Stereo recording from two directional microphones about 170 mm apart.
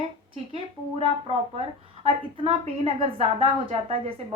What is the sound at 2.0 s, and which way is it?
A woman's voice, 35° right (ahead or behind).